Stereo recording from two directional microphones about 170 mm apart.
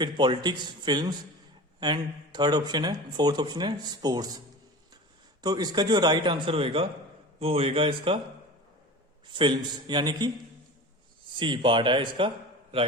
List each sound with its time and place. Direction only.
0.0 s speech: 25° right (ahead or behind)
9.2 s speech: 30° right (ahead or behind)
11.3 s speech: 30° right (ahead or behind)